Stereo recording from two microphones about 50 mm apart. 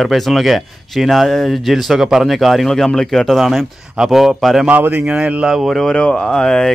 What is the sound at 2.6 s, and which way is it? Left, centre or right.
Speech, centre.